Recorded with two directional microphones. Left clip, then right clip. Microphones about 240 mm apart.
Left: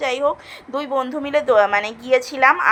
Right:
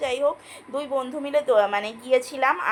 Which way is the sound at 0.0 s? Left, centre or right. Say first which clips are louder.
Left 4 dB; centre.